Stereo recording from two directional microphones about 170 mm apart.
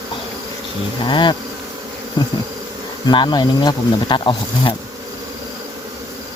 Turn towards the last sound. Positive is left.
turn(degrees=30)  # may be behind; listen again after turning